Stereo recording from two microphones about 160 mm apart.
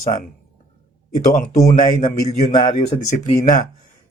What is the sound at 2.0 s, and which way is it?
Speech, 55° left (ahead or behind).